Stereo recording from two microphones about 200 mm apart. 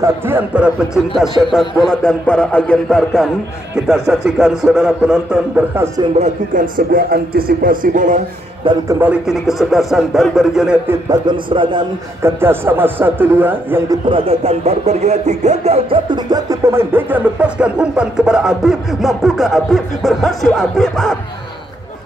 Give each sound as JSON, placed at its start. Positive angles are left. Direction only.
{"t": 0.0, "sound": "speech", "side_deg": -10}
{"t": 6.1, "sound": "speech", "side_deg": -40}
{"t": 8.6, "sound": "a man's voice", "side_deg": -25}
{"t": 9.0, "sound": "speech", "side_deg": -5}
{"t": 11.1, "sound": "a man's voice", "side_deg": -25}
{"t": 12.2, "sound": "speech", "side_deg": -10}
{"t": 14.0, "sound": "speech", "side_deg": -30}